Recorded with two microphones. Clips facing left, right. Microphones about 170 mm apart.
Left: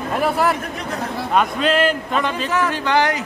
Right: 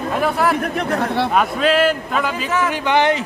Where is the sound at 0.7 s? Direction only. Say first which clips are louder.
Right 6 dB; 65° right (ahead or behind).